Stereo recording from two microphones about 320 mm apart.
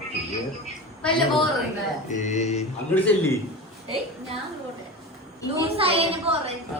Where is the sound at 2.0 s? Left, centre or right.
Left.